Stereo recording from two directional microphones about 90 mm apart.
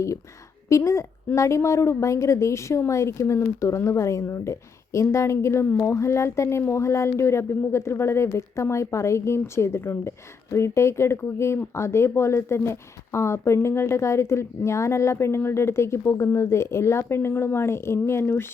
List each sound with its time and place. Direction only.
0.7 s speech: 35° left (ahead or behind)